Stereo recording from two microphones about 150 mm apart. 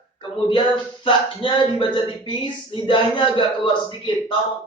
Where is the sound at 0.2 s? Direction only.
30° left (ahead or behind).